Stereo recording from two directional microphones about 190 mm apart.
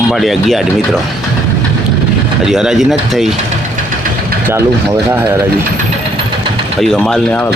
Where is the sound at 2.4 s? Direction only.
Centre (ahead or behind).